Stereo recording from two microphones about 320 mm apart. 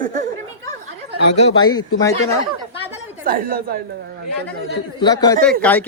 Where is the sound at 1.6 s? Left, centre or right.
Centre.